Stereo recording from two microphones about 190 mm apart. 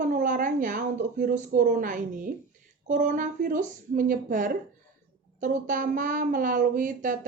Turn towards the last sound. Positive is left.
turn(degrees=-45)  # may be behind; listen again after turning